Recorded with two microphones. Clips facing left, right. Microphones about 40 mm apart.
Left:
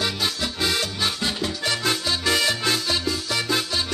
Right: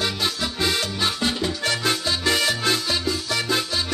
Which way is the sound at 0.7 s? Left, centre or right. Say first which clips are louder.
Right 1 dB; centre.